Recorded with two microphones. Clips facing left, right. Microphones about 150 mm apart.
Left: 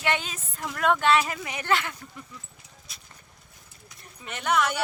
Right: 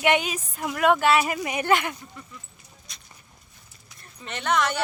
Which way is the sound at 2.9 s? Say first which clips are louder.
Right 1 dB; 5° left (ahead or behind).